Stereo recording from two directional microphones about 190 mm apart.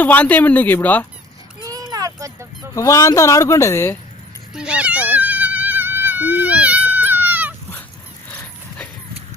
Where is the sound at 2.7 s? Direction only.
15° left (ahead or behind).